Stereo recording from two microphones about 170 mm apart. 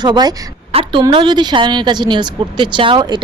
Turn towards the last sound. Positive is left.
turn(degrees=-25)  # may be behind; listen again after turning